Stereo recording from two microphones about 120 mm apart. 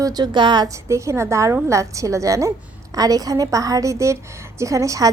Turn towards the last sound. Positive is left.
turn(degrees=-25)  # may be behind; listen again after turning